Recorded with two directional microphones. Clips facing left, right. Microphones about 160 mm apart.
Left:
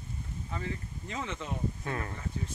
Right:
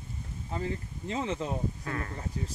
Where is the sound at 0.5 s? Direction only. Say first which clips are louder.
Right 4 dB; 30° right (ahead or behind).